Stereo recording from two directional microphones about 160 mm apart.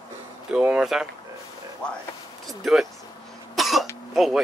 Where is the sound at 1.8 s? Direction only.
5° left (ahead or behind).